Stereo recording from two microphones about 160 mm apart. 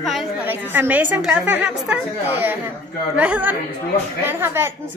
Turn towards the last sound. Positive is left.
turn(degrees=-15)  # may be behind; listen again after turning